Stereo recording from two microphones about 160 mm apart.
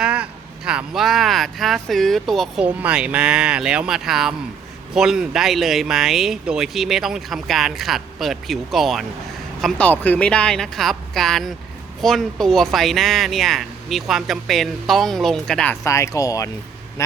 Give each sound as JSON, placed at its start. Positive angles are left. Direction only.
{"t": 0.0, "sound": "speech", "side_deg": -5}
{"t": 15.8, "sound": "speech", "side_deg": 20}